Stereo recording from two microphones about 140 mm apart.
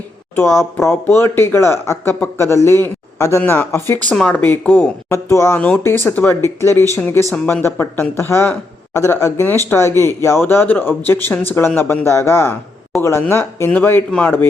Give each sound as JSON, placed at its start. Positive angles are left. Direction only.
{"t": 0.8, "sound": "speech", "side_deg": 15}
{"t": 5.5, "sound": "speech", "side_deg": 10}